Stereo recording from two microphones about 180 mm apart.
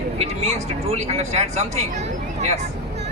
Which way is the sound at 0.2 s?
35° right (ahead or behind).